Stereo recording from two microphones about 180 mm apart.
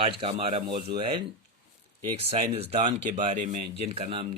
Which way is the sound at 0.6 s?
60° right (ahead or behind).